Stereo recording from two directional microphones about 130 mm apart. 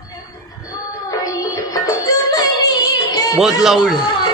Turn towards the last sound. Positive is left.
turn(degrees=0)  # may be behind; listen again after turning